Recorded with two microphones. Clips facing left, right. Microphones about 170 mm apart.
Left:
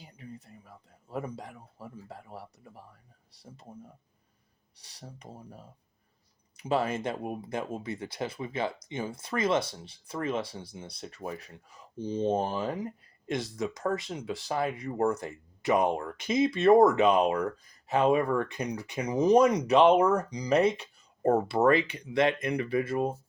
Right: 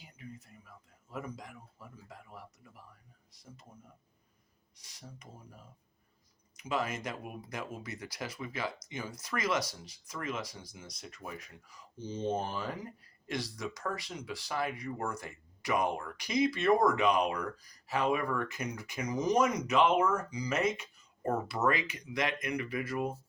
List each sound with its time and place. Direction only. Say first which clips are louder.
0.0 s speech: left 3 dB; 35° left (ahead or behind)
4.8 s speech: left 4 dB; 35° left (ahead or behind)
12.5 s speech: left 6 dB; 20° left (ahead or behind)
18.5 s speech: left 6 dB; 35° left (ahead or behind)